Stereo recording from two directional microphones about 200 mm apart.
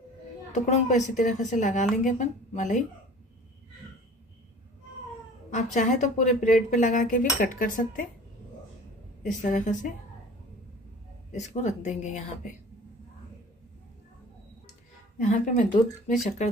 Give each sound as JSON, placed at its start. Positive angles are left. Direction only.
{"t": 0.7, "sound": "speech", "side_deg": 35}
{"t": 5.5, "sound": "speech", "side_deg": 35}
{"t": 9.2, "sound": "speech", "side_deg": 40}
{"t": 11.3, "sound": "speech", "side_deg": 35}
{"t": 15.1, "sound": "speech", "side_deg": 35}